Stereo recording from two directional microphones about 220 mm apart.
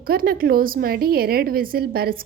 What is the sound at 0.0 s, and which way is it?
A woman's voice, 40° right (ahead or behind).